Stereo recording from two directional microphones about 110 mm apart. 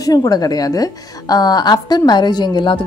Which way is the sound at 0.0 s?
35° left (ahead or behind).